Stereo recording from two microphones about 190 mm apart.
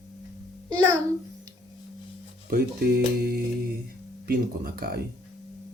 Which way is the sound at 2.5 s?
50° right (ahead or behind).